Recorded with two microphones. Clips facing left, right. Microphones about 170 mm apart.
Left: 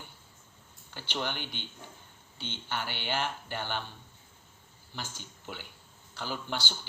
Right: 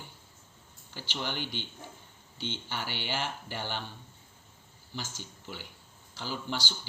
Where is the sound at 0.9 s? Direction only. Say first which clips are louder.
Left 1 dB; 55° left (ahead or behind).